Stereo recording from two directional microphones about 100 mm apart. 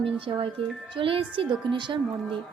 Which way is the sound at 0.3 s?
50° right (ahead or behind).